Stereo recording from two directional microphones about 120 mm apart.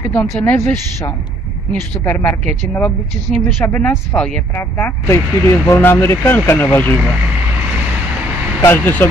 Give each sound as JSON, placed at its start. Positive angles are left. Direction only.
{"t": 0.0, "sound": "speech", "side_deg": 10}
{"t": 3.6, "sound": "speech", "side_deg": 20}
{"t": 8.5, "sound": "speech", "side_deg": 20}